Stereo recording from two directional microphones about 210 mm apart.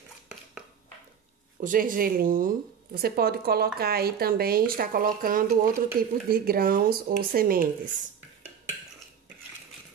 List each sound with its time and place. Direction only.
1.6 s speech: 40° right (ahead or behind)